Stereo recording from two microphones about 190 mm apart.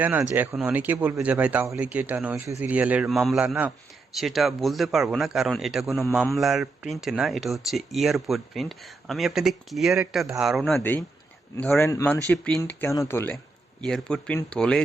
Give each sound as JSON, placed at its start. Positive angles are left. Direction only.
{"t": 0.0, "sound": "a man's voice", "side_deg": -10}
{"t": 10.8, "sound": "speech", "side_deg": 10}